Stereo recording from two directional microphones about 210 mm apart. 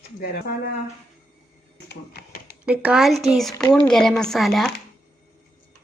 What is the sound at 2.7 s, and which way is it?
Speech, 5° right (ahead or behind).